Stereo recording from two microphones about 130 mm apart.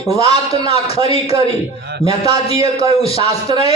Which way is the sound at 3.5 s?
35° right (ahead or behind).